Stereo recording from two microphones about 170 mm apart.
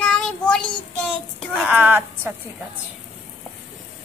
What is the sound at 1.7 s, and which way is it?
Speech, 10° right (ahead or behind).